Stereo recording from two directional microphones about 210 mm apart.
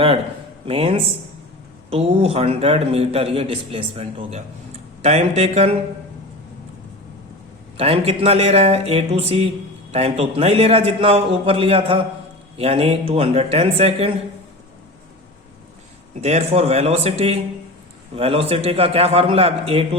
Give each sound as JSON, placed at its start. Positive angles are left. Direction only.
{"t": 0.6, "sound": "a man's voice", "side_deg": -25}
{"t": 7.8, "sound": "a man's voice", "side_deg": -25}
{"t": 16.2, "sound": "a man's voice", "side_deg": -30}